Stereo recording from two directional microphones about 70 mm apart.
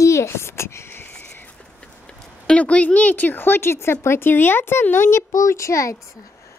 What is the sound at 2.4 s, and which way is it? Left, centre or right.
A woman's voice, centre.